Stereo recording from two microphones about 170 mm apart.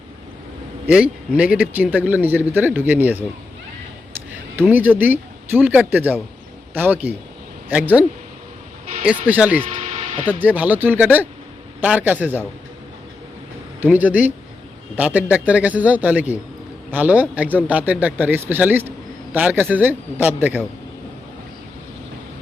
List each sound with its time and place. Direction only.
0.9 s a man's voice: 5° right (ahead or behind)
4.5 s a man's voice: 10° right (ahead or behind)
9.0 s a man's voice: 10° right (ahead or behind)
13.8 s a man's voice: 10° right (ahead or behind)